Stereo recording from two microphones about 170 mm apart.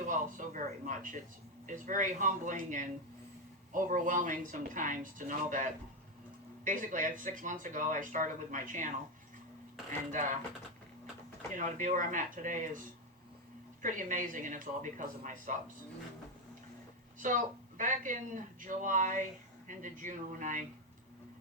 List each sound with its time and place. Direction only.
0.1 s speech: 50° right (ahead or behind)
6.7 s speech: 50° right (ahead or behind)
10.1 s speech: 50° right (ahead or behind)
11.5 s speech: 50° right (ahead or behind)
13.8 s speech: 50° right (ahead or behind)
17.2 s a woman's voice: 50° right (ahead or behind)